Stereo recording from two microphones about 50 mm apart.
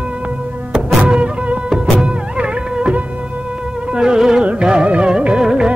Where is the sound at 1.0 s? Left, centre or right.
Right.